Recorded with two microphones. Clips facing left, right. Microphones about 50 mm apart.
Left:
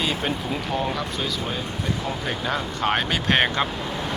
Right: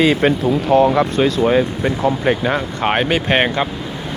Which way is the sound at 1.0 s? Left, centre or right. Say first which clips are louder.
Right 12 dB; right.